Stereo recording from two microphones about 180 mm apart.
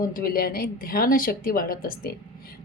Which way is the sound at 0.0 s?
55° left (ahead or behind).